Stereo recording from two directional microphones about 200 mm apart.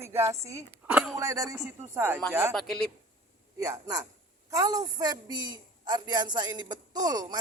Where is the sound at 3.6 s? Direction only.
15° right (ahead or behind).